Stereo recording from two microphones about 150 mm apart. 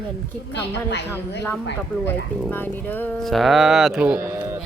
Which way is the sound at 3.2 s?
Centre (ahead or behind).